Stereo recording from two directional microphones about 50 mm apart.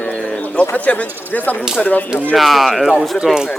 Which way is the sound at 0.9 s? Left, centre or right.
Left.